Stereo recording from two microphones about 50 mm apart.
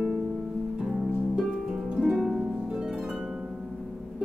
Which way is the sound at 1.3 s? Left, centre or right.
Centre.